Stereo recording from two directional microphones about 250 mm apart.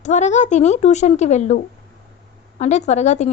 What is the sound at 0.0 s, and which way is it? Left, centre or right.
Speech, left.